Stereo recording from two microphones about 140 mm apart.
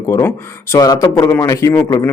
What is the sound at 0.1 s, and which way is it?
A man's voice, 20° left (ahead or behind).